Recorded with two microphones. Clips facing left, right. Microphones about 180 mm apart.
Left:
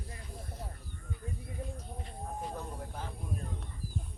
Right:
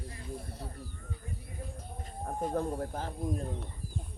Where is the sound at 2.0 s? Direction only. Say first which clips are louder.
Right 6 dB; 45° right (ahead or behind).